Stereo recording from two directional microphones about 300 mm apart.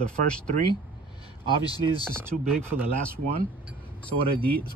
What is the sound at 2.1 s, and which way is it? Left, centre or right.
Speech, centre.